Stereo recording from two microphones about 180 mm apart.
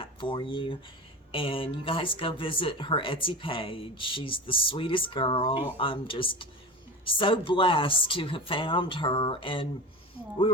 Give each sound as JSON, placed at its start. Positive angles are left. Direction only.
{"t": 0.0, "sound": "speech", "side_deg": 30}